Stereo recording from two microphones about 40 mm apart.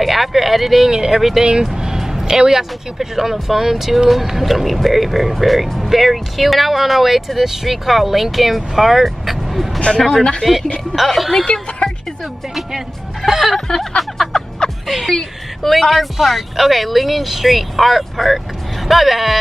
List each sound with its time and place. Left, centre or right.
0.0 s speech: centre
0.9 s speech: centre
1.7 s music: centre
2.2 s speech: centre
9.9 s speech: centre
13.3 s speech: centre
13.7 s a sound: centre
14.6 s music: centre
15.6 s speech: centre